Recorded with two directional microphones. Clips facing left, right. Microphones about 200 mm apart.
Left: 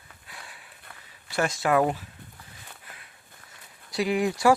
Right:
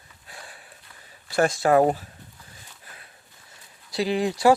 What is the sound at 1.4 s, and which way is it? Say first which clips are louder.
Speech: right 5 dB; 35° right (ahead or behind).